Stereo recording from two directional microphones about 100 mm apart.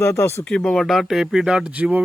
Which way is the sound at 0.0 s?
30° left (ahead or behind).